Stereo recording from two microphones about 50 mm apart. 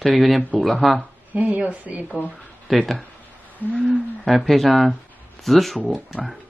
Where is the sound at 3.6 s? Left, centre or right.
Left.